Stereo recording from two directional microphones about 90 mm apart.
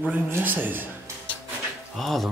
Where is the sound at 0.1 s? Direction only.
20° right (ahead or behind).